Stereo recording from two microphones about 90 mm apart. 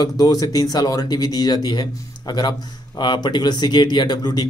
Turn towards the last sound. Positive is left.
turn(degrees=50)  # may be behind; listen again after turning